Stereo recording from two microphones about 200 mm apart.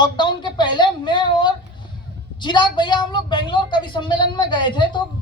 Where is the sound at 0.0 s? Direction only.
25° left (ahead or behind).